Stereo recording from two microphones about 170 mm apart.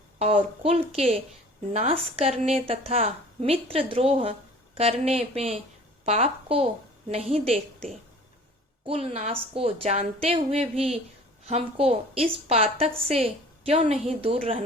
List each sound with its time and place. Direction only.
0.2 s a woman's voice: 35° right (ahead or behind)
8.9 s a woman's voice: 35° right (ahead or behind)